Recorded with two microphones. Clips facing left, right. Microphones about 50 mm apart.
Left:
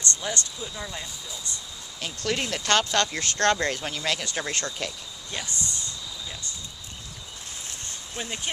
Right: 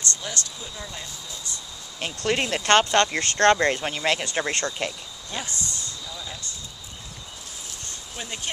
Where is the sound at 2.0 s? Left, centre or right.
Right.